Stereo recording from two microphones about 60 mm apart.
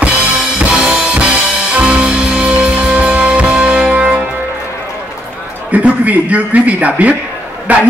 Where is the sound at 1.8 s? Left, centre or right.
Centre.